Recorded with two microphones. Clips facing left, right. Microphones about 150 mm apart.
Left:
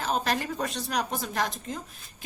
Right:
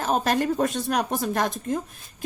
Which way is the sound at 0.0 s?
45° right (ahead or behind).